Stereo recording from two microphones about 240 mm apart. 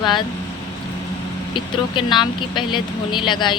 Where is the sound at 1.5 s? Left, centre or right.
Centre.